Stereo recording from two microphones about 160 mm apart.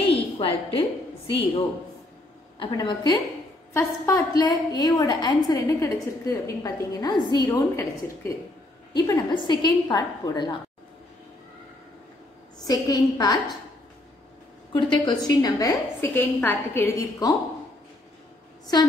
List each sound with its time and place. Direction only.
0.1 s a sound: 35° left (ahead or behind)
2.6 s a woman's voice: 25° left (ahead or behind)
12.5 s a woman's voice: 25° left (ahead or behind)
14.7 s a woman's voice: 30° left (ahead or behind)